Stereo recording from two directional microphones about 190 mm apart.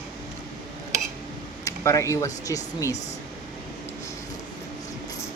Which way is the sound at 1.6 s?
15° left (ahead or behind).